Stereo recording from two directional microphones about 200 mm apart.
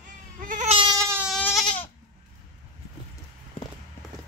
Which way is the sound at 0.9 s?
15° right (ahead or behind).